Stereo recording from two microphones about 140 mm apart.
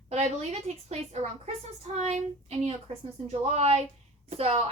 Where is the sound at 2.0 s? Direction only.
50° right (ahead or behind).